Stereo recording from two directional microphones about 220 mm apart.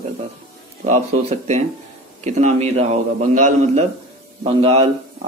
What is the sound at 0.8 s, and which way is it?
A man's voice, 30° right (ahead or behind).